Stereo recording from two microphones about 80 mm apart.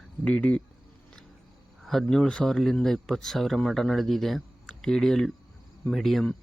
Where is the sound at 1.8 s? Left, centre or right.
Centre.